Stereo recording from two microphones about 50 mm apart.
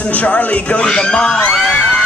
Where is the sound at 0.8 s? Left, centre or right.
Centre.